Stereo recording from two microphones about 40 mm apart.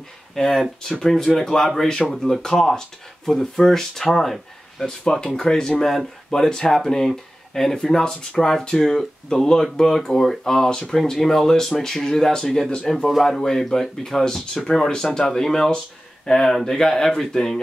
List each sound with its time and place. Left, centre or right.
0.3 s speech: centre
6.5 s speech: centre